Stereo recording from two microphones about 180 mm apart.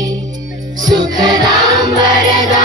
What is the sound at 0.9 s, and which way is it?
Music, 25° right (ahead or behind).